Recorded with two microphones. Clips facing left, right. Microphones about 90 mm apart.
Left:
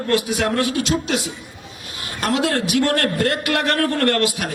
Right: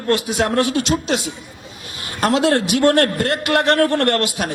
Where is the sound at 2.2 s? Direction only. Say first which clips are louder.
Right 4 dB; 25° right (ahead or behind).